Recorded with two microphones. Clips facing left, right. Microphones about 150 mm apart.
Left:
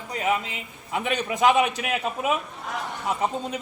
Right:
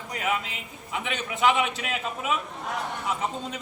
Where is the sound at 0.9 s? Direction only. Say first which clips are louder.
Left 5 dB; 40° left (ahead or behind).